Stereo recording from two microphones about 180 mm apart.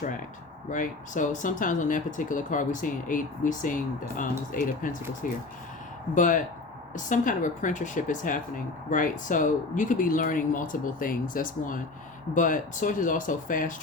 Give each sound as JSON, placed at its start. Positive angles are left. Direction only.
{"t": 0.7, "sound": "a woman's voice", "side_deg": 45}